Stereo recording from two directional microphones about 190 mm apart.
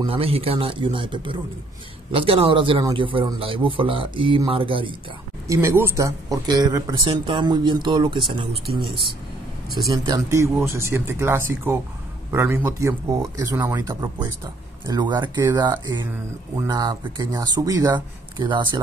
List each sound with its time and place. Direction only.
0.0 s a man's voice: 30° right (ahead or behind)
5.5 s a man's voice: 15° right (ahead or behind)
9.8 s a man's voice: 20° right (ahead or behind)